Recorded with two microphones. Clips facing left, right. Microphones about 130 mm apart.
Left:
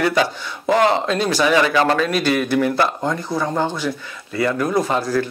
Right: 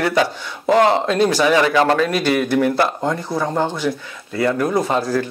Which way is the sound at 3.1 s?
20° right (ahead or behind).